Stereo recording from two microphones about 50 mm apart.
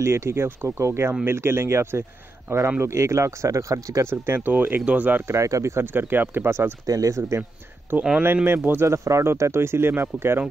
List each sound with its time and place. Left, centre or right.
0.0 s speech: right
4.4 s speech: right
5.2 s speech: right
5.9 s speech: right
7.1 s speech: right
7.9 s speech: right
8.8 s speech: right
9.4 s speech: right